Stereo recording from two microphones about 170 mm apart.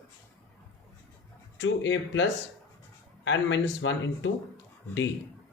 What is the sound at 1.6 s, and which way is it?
Speech, 90° left.